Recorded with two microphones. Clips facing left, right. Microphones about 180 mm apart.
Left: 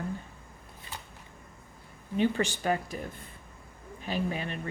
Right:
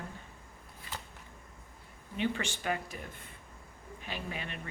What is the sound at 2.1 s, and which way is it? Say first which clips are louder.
Speech: left 7 dB; 40° left (ahead or behind).